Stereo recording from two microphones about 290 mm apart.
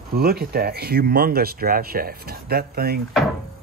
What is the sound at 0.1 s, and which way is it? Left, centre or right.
Speech, right.